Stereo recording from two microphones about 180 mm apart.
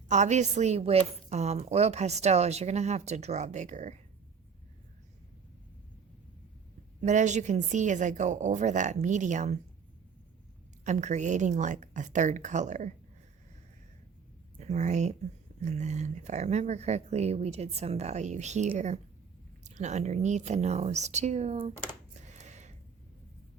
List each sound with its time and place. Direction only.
0.1 s a woman's voice: 40° right (ahead or behind)
7.0 s a woman's voice: 40° right (ahead or behind)
10.8 s a woman's voice: 40° right (ahead or behind)
14.6 s a woman's voice: 40° right (ahead or behind)
22.2 s a sound: 40° right (ahead or behind)